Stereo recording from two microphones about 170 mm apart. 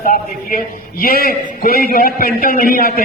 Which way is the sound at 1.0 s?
60° left (ahead or behind).